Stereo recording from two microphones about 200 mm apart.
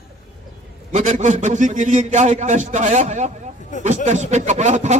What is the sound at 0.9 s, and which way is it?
A man's voice, 35° right (ahead or behind).